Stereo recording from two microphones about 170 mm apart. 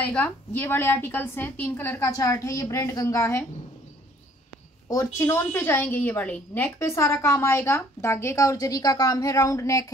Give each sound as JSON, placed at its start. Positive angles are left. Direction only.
{"t": 0.0, "sound": "a woman's voice", "side_deg": 10}
{"t": 4.8, "sound": "a woman's voice", "side_deg": 15}